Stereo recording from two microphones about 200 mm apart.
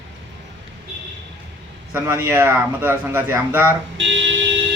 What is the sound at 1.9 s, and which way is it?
Speech, 10° right (ahead or behind).